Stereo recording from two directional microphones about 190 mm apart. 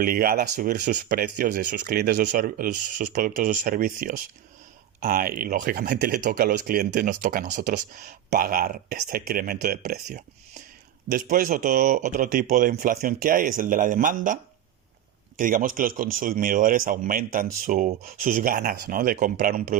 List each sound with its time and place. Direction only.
0.0 s speech: 50° right (ahead or behind)
15.4 s speech: 45° right (ahead or behind)